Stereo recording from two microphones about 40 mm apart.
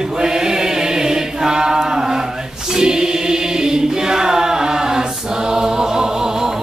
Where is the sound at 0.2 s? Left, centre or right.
Centre.